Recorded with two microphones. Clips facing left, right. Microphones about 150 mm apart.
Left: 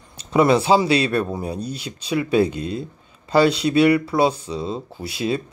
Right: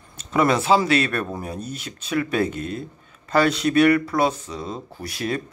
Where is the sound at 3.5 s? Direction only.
25° left (ahead or behind).